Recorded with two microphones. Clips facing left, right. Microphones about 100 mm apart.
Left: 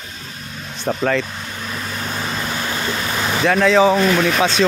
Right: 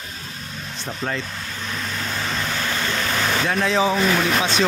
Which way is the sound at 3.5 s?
90° left.